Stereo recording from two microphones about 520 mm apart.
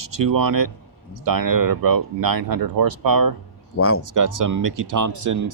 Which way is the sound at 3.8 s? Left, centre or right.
Left.